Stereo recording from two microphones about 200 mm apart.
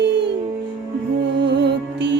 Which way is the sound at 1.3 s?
60° right (ahead or behind).